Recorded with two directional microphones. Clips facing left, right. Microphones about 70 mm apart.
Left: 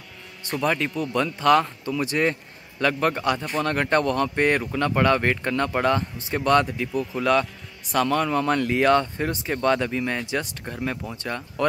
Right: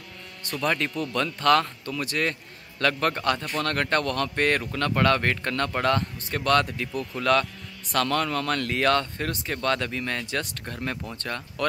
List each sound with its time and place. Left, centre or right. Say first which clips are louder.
0.6 s a man's voice: left 2 dB; centre